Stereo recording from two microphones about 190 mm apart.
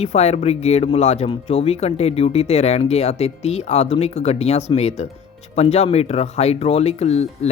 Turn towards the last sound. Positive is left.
turn(degrees=35)  # may be behind; listen again after turning